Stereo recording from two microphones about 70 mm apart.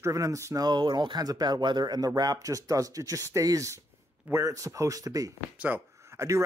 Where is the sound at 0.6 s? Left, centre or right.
Right.